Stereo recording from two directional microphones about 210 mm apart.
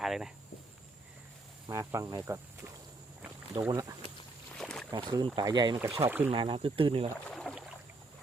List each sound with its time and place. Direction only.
0.0 s speech: centre (ahead or behind)
1.6 s speech: 15° right (ahead or behind)
4.5 s boat: centre (ahead or behind)
4.9 s speech: 20° right (ahead or behind)
6.1 s speech: 10° right (ahead or behind)
6.3 s speech: 25° right (ahead or behind)
7.3 s a sound: centre (ahead or behind)